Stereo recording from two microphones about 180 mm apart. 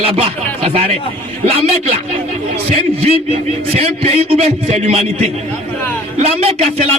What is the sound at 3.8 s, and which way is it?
A man's voice, 35° right (ahead or behind).